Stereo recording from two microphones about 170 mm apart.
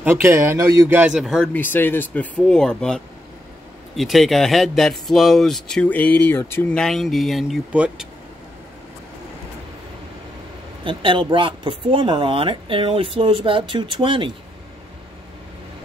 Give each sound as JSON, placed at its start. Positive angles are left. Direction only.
{"t": 0.0, "sound": "speech", "side_deg": -15}
{"t": 10.8, "sound": "speech", "side_deg": -30}